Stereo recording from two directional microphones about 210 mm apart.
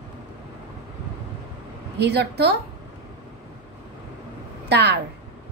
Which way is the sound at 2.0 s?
55° right (ahead or behind).